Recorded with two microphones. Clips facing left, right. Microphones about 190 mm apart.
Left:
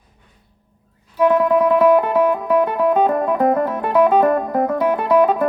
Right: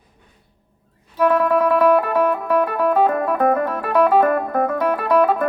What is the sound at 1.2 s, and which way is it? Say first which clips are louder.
Music: left 2 dB; 20° left (ahead or behind).